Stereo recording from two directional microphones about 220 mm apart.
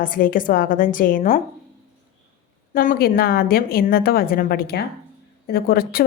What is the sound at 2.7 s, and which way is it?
A woman's voice, 40° left (ahead or behind).